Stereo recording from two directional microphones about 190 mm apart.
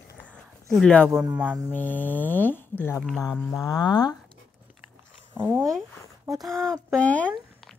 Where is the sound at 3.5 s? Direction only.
20° left (ahead or behind).